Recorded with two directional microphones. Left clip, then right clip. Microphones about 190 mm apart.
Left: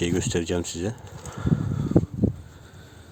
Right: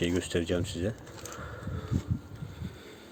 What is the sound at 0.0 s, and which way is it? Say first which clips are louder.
Speech: left 4 dB; 30° left (ahead or behind).